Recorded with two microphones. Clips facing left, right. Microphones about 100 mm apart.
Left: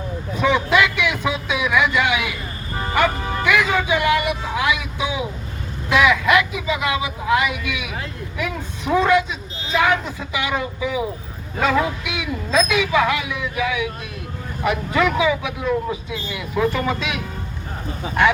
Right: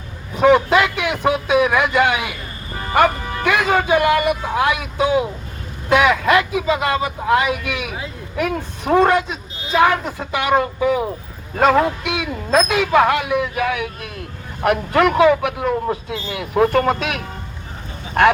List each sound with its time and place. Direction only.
0.3 s a sound: 50° right (ahead or behind)
3.4 s a woman's voice: 55° right (ahead or behind)
6.0 s speech: 40° right (ahead or behind)
6.4 s a man's voice: 55° right (ahead or behind)
6.7 s a woman's voice: 40° right (ahead or behind); by 17.2 s 60° right (ahead or behind)